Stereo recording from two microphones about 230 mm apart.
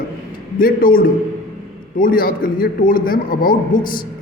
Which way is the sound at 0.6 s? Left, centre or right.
Left.